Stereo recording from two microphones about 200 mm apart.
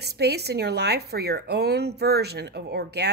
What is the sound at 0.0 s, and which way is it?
Speech, 55° right (ahead or behind).